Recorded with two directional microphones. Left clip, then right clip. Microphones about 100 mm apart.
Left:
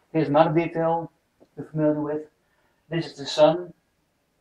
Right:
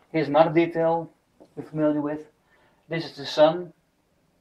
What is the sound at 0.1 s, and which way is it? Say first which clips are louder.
Speech: even; 20° right (ahead or behind).